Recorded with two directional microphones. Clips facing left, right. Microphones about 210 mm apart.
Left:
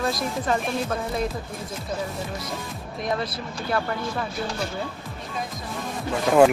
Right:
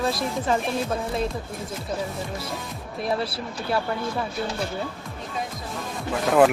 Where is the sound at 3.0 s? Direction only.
30° right (ahead or behind).